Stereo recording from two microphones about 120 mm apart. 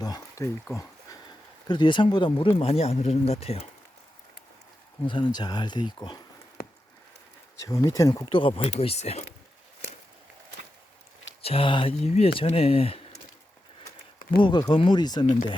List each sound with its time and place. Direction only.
0.0 s a sound: 30° left (ahead or behind)
1.6 s speech: 40° left (ahead or behind)
2.6 s speech: 55° left (ahead or behind)
5.0 s speech: 40° left (ahead or behind)
7.6 s speech: 25° left (ahead or behind)
8.3 s speech: 45° left (ahead or behind)
8.8 s speech: 60° left (ahead or behind)
11.4 s speech: 50° left (ahead or behind)
14.3 s speech: 40° left (ahead or behind)